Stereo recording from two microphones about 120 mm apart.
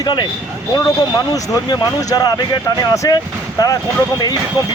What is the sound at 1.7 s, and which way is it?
Speech, 30° left (ahead or behind).